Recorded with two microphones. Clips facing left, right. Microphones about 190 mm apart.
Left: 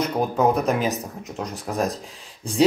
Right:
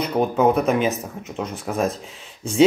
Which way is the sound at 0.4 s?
Centre (ahead or behind).